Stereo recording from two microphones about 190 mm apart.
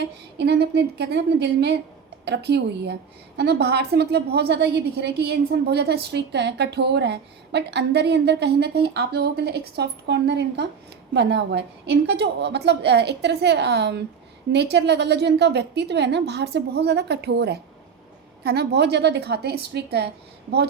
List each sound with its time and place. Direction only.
0.0 s a woman's voice: 60° right (ahead or behind)